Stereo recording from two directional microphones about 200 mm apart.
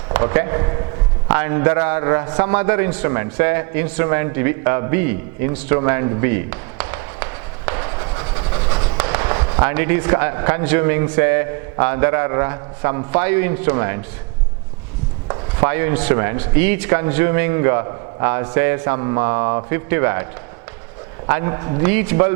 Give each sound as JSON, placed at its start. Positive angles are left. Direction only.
{"t": 0.1, "sound": "a man's voice", "side_deg": -15}
{"t": 8.7, "sound": "fireworks", "side_deg": -20}
{"t": 9.6, "sound": "speech", "side_deg": -15}
{"t": 15.3, "sound": "speech", "side_deg": -15}
{"t": 21.2, "sound": "a man's voice", "side_deg": -15}
{"t": 21.8, "sound": "speech", "side_deg": -10}